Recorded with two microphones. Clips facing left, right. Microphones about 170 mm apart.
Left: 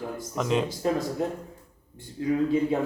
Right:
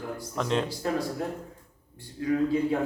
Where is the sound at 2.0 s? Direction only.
25° left (ahead or behind).